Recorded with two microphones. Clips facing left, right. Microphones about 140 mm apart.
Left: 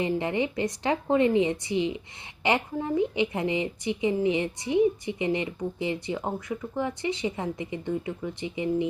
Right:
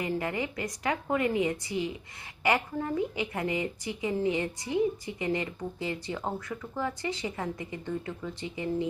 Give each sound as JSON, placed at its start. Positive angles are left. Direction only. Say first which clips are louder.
{"t": 0.0, "sound": "a woman's voice", "louder": "left 5 dB", "side_deg": 20}